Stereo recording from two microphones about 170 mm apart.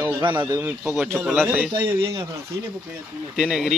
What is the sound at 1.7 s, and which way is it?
Speech, 20° right (ahead or behind).